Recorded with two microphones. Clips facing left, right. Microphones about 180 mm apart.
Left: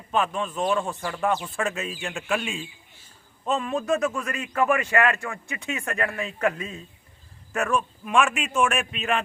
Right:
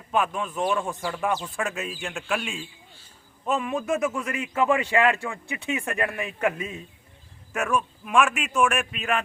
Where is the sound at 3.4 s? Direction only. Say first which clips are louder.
Left 1 dB; 10° right (ahead or behind).